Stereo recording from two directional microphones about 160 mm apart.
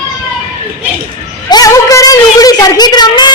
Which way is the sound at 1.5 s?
25° left (ahead or behind).